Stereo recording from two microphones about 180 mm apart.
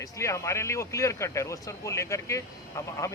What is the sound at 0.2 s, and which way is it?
Speech, 15° left (ahead or behind).